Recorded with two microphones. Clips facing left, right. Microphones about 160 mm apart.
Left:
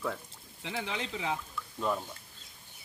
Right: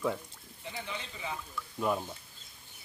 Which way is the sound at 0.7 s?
85° left.